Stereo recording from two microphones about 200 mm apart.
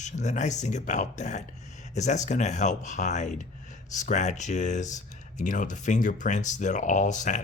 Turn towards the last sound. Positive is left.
turn(degrees=35)  # may be behind; listen again after turning